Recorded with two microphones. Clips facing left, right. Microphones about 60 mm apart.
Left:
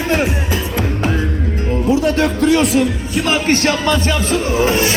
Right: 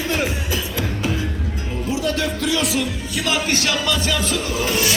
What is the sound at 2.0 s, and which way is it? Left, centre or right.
Speech, left.